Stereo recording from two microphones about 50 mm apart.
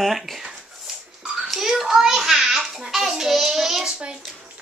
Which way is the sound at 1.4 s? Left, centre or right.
Centre.